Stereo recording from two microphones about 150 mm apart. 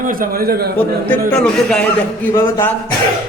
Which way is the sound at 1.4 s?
5° left (ahead or behind).